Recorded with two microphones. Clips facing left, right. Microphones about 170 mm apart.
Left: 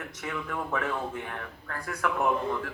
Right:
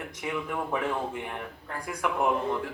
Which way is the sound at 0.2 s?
15° right (ahead or behind).